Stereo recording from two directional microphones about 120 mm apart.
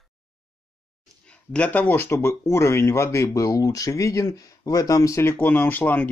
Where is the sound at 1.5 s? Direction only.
10° left (ahead or behind).